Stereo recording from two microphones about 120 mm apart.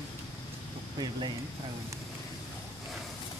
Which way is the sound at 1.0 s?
40° right (ahead or behind).